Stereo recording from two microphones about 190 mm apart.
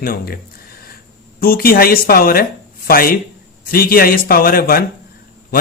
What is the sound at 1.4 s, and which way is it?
A man's voice, 50° left (ahead or behind).